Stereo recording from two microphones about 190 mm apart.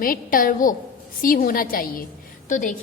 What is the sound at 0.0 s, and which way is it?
A woman's voice, 50° left (ahead or behind).